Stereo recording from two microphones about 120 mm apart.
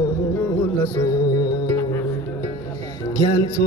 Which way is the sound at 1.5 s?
25° left (ahead or behind).